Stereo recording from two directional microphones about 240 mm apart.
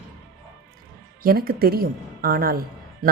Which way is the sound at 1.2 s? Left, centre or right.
Right.